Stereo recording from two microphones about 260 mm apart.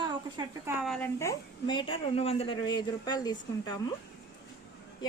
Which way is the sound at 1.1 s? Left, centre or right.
Centre.